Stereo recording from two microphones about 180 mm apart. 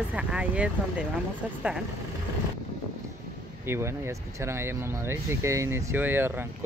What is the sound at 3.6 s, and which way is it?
Speech, 15° right (ahead or behind).